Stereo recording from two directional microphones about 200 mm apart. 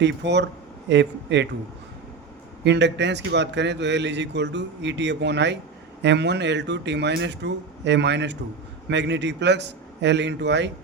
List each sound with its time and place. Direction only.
0.0 s a man's voice: 60° right (ahead or behind)
2.6 s a man's voice: 60° right (ahead or behind)